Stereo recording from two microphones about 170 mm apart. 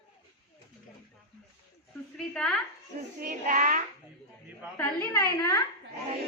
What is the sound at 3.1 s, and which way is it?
Speech, 50° right (ahead or behind).